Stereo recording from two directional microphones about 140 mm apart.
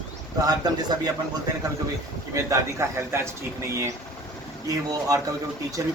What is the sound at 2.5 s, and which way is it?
Speech, 20° right (ahead or behind).